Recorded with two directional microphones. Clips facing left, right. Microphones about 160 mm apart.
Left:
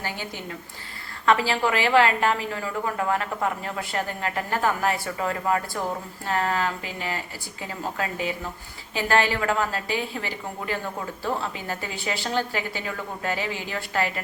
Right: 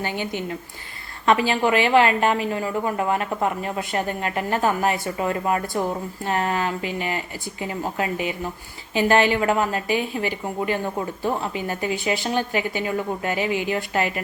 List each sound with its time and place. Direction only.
0.0 s a woman's voice: 20° right (ahead or behind)